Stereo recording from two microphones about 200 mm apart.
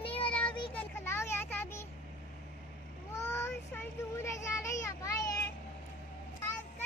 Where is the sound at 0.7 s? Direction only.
10° left (ahead or behind).